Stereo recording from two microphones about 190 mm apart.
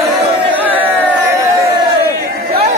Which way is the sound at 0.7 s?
10° right (ahead or behind).